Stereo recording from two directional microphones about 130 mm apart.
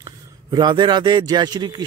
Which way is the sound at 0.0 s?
35° right (ahead or behind).